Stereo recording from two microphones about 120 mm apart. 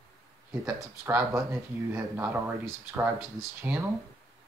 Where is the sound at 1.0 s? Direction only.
25° right (ahead or behind).